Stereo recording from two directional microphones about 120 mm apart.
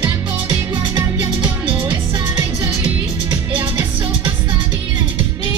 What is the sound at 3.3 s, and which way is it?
Music, 40° right (ahead or behind).